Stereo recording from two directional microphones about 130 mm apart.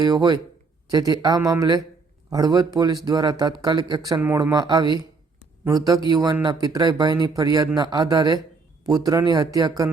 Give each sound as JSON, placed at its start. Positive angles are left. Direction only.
{"t": 0.0, "sound": "speech", "side_deg": -30}